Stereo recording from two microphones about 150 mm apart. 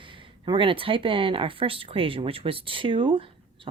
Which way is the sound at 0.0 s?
35° right (ahead or behind).